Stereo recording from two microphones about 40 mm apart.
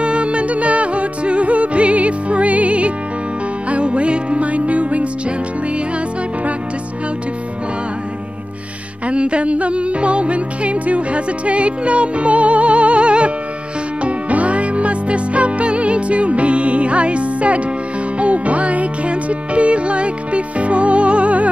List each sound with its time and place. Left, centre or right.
0.0 s music: right
9.0 s music: right